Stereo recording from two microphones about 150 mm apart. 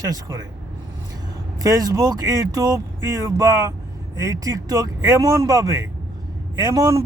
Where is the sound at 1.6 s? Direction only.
25° right (ahead or behind).